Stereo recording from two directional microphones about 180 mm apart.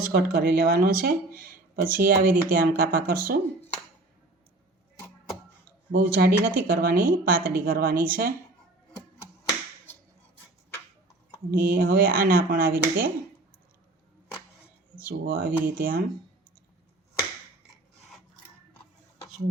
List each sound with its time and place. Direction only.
0.1 s speech: 55° right (ahead or behind)
5.9 s speech: 55° right (ahead or behind)
9.4 s a sound: 10° left (ahead or behind)
11.5 s speech: 55° right (ahead or behind)
14.9 s speech: 55° right (ahead or behind)